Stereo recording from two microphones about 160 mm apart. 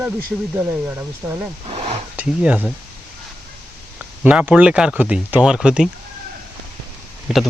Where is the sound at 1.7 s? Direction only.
40° right (ahead or behind).